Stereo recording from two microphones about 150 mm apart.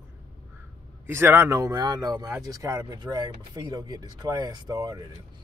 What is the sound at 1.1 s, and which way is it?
Speech, 15° right (ahead or behind).